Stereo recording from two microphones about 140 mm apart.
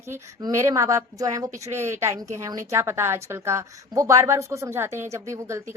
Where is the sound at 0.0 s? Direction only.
20° right (ahead or behind).